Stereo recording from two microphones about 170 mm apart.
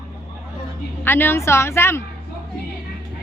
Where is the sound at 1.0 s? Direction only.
10° left (ahead or behind).